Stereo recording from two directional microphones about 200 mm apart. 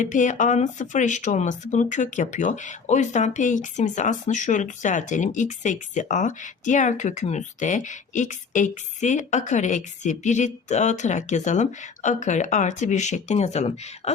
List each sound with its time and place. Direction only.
0.0 s speech: 40° left (ahead or behind)